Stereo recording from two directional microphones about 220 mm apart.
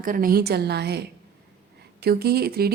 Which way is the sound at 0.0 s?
40° right (ahead or behind).